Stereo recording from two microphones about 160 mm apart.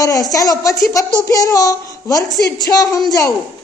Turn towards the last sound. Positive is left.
turn(degrees=20)  # may be behind; listen again after turning